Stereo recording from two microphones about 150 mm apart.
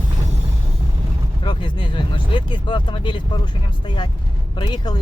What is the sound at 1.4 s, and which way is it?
Speech, 35° left (ahead or behind).